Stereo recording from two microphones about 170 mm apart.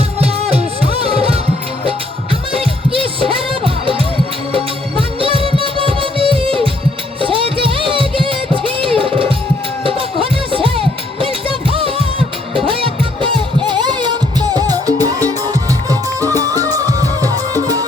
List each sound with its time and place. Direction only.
0.2 s music: 35° right (ahead or behind)
2.5 s music: 35° right (ahead or behind)